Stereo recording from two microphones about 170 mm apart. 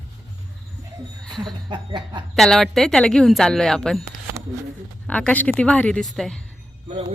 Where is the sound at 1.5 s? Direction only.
25° right (ahead or behind).